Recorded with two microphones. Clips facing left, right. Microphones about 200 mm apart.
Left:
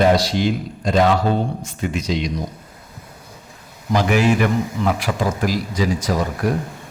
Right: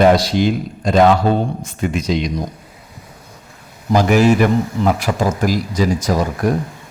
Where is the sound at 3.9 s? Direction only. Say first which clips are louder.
Right 4 dB; 40° right (ahead or behind).